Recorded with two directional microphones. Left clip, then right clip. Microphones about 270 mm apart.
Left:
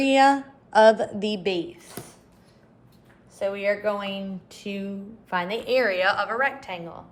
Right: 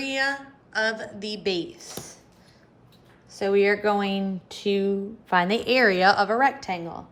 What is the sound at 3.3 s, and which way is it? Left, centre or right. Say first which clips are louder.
A woman's voice: right 4 dB; right.